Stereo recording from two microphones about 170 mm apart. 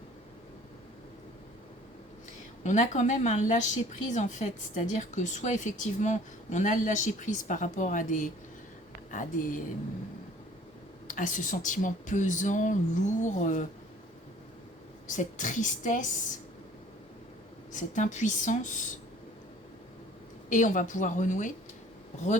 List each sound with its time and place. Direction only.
2.6 s speech: 45° left (ahead or behind)
11.1 s speech: 50° left (ahead or behind)
15.0 s speech: 50° left (ahead or behind)
17.7 s speech: 45° left (ahead or behind)
20.5 s speech: 50° left (ahead or behind)